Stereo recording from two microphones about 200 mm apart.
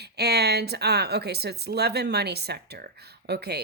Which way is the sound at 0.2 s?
55° right (ahead or behind).